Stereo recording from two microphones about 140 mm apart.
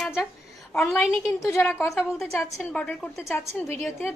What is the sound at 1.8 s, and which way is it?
Speech, 20° left (ahead or behind).